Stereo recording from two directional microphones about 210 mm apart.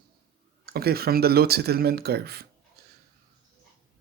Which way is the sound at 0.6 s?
50° right (ahead or behind).